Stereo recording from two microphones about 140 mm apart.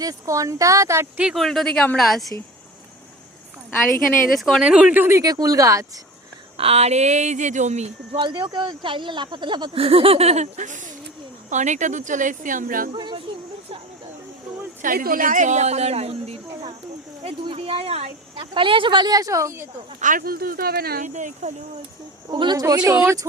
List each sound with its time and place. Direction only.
0.0 s speech: 25° right (ahead or behind)
1.2 s speech: centre (ahead or behind)
4.4 s speech: centre (ahead or behind); by 5.8 s 25° right (ahead or behind)
6.6 s speech: 50° right (ahead or behind)
8.1 s speech: 35° right (ahead or behind); by 12.9 s 80° right
12.9 s speech: 35° right (ahead or behind)
14.8 s speech: 80° right; by 19.6 s 20° right (ahead or behind)
20.0 s speech: 75° right (ahead or behind)
22.3 s speech: 35° right (ahead or behind)